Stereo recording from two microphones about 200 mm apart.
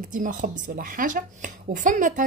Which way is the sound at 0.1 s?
40° right (ahead or behind).